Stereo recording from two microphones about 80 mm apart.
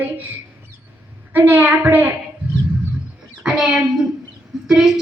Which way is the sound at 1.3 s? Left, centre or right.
Right.